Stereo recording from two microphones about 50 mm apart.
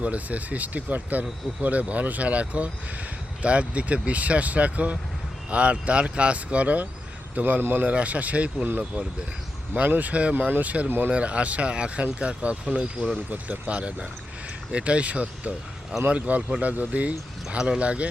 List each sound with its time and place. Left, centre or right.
0.0 s speech: right
7.6 s speech: right
7.9 s speech: right